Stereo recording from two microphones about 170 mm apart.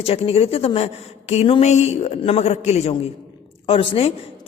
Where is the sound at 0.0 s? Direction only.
35° left (ahead or behind).